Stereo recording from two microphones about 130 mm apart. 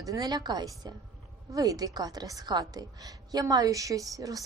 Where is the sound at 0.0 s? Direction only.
25° right (ahead or behind).